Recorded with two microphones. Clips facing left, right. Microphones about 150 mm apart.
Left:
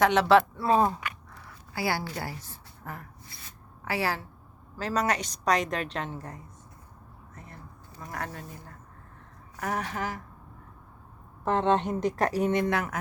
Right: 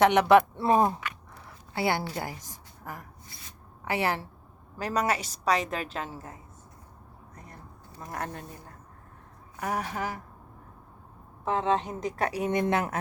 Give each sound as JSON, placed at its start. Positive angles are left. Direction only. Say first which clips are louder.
{"t": 0.0, "sound": "a woman's voice", "louder": "right 1 dB", "side_deg": -20}
{"t": 8.0, "sound": "speech", "louder": "right 1 dB", "side_deg": -20}
{"t": 9.6, "sound": "speech", "louder": "even", "side_deg": -10}
{"t": 11.4, "sound": "a woman's voice", "louder": "left 2 dB", "side_deg": 0}
{"t": 12.5, "sound": "speech", "louder": "even", "side_deg": -20}